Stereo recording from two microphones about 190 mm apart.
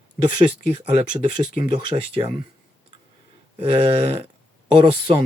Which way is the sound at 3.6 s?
30° right (ahead or behind).